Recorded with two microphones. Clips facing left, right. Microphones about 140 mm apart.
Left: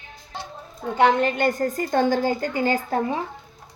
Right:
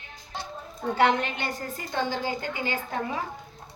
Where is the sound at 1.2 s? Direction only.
50° left (ahead or behind).